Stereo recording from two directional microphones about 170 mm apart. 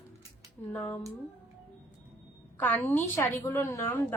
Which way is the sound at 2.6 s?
10° left (ahead or behind).